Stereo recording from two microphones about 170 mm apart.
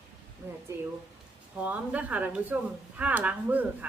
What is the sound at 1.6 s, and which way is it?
A woman's voice, 10° right (ahead or behind).